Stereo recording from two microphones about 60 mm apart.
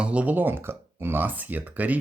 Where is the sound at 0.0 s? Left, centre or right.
Right.